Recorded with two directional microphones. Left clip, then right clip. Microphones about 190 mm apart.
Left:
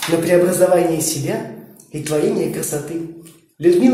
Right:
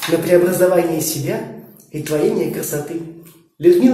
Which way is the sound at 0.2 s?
20° left (ahead or behind).